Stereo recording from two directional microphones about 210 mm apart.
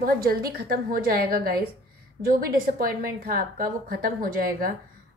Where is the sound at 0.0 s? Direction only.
45° right (ahead or behind).